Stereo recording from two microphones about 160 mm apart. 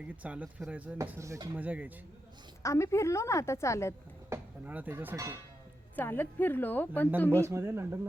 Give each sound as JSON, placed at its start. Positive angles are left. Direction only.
{"t": 0.2, "sound": "speech", "side_deg": -10}
{"t": 2.6, "sound": "a woman's voice", "side_deg": 20}
{"t": 4.3, "sound": "speech", "side_deg": -10}
{"t": 6.0, "sound": "a woman's voice", "side_deg": 10}
{"t": 7.3, "sound": "speech", "side_deg": -15}